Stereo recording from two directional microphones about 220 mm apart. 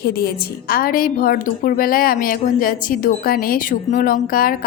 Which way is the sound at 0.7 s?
40° left (ahead or behind).